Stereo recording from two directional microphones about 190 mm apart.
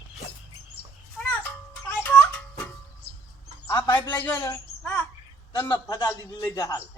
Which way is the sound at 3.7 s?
20° left (ahead or behind).